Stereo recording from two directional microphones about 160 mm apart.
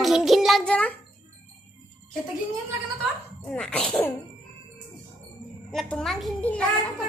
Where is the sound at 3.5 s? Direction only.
5° left (ahead or behind).